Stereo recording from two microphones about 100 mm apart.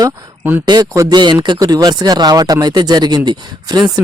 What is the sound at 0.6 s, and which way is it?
A man's voice, 40° right (ahead or behind).